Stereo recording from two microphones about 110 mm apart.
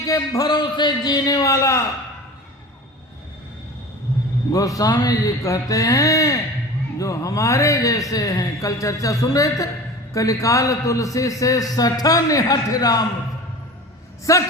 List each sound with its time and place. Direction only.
0.0 s a man's voice: 25° left (ahead or behind)
0.4 s a man's voice: 40° left (ahead or behind)
4.5 s a man's voice: 30° left (ahead or behind)
14.3 s a man's voice: 30° left (ahead or behind)